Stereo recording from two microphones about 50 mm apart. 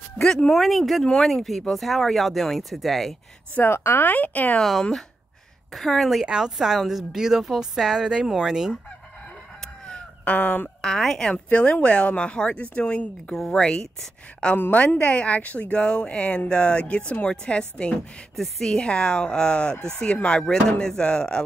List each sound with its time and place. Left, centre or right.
0.6 s speech: centre
3.6 s speech: left
4.6 s speech: centre
6.2 s a woman's voice: centre
9.8 s chicken: left
10.8 s speech: centre
11.4 s speech: left
13.3 s speech: centre
14.7 s speech: left
18.3 s speech: centre